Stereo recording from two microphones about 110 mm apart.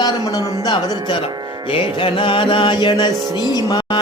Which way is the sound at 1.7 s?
50° left (ahead or behind).